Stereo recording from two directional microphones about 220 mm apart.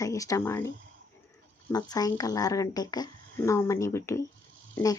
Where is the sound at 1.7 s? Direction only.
15° left (ahead or behind).